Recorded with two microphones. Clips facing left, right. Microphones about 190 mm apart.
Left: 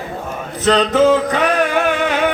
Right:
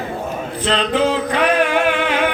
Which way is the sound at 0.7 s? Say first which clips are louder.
Left 6 dB; 45° left (ahead or behind).